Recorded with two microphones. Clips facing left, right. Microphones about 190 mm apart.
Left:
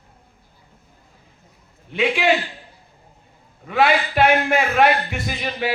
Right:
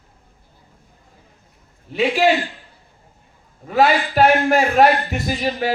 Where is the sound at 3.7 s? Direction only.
40° right (ahead or behind).